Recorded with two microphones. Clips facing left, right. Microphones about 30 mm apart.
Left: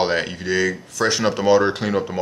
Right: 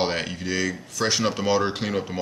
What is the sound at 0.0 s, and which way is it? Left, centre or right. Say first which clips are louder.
Speech: left 5 dB; centre.